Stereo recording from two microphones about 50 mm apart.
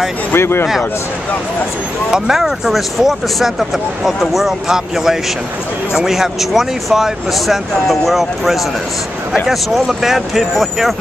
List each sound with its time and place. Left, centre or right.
0.3 s speech: left
2.0 s speech: centre